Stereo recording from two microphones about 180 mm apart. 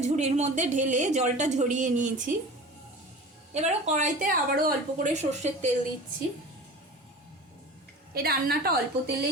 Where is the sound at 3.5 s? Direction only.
40° right (ahead or behind).